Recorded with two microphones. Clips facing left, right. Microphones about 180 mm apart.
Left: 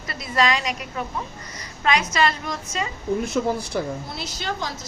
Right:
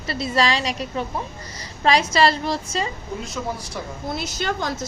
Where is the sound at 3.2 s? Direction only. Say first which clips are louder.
Left 4 dB; 60° left (ahead or behind).